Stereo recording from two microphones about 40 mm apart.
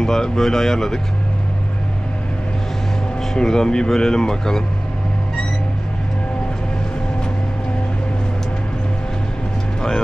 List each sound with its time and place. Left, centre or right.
0.0 s speech: centre
3.2 s speech: centre
9.8 s speech: centre